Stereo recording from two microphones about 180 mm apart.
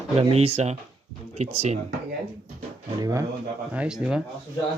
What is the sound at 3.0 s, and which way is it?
Speech, 20° right (ahead or behind).